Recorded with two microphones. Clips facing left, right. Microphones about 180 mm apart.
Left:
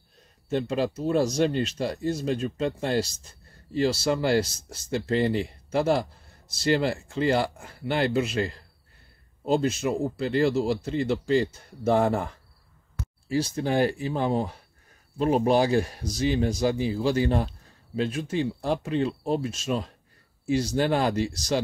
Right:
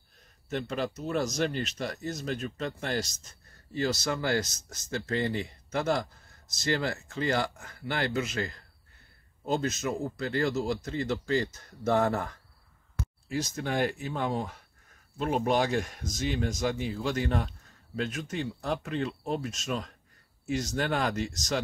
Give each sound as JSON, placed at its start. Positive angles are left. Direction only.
{"t": 0.5, "sound": "a man's voice", "side_deg": 30}
{"t": 13.3, "sound": "speech", "side_deg": 30}